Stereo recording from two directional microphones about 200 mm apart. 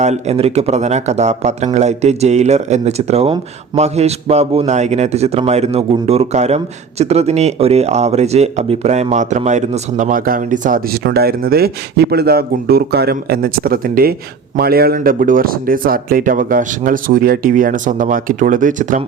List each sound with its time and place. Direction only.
0.0 s speech: 30° right (ahead or behind)